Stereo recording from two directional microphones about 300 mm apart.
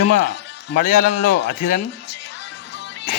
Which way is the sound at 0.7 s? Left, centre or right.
Left.